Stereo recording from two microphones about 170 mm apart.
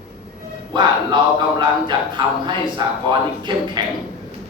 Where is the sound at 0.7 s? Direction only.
25° right (ahead or behind).